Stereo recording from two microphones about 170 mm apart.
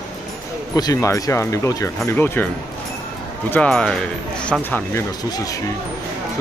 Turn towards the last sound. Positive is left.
turn(degrees=20)  # may be behind; listen again after turning